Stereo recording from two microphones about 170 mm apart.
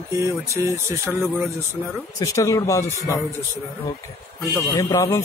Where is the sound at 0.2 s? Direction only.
20° right (ahead or behind).